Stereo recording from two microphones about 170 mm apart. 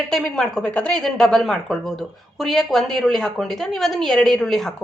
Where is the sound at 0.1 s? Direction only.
5° left (ahead or behind).